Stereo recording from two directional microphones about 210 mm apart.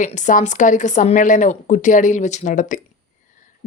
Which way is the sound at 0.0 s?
35° left (ahead or behind).